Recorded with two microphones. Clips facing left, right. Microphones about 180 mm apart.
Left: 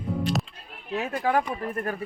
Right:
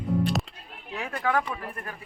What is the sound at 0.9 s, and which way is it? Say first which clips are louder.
Speech: left 3 dB; 25° left (ahead or behind).